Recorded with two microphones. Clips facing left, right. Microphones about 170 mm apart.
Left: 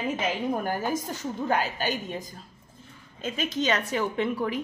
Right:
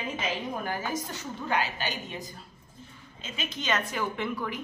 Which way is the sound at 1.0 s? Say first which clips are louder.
Left 5 dB; 40° left (ahead or behind).